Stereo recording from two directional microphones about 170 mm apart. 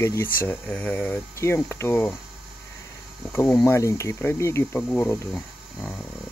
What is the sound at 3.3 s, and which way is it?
Speech, 15° left (ahead or behind).